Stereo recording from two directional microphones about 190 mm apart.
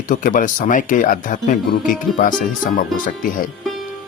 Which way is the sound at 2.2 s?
45° left (ahead or behind).